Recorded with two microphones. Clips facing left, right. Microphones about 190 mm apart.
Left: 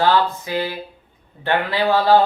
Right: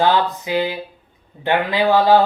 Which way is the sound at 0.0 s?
15° right (ahead or behind).